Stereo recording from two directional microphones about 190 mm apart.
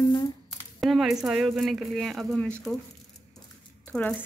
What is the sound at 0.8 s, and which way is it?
Speech, centre (ahead or behind).